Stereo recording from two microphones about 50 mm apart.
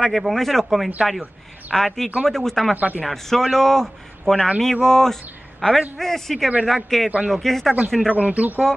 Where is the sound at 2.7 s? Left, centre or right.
Right.